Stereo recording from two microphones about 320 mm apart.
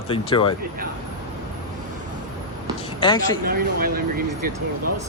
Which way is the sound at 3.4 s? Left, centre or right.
Right.